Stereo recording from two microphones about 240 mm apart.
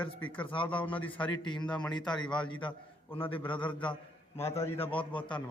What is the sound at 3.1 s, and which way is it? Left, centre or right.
Speech, left.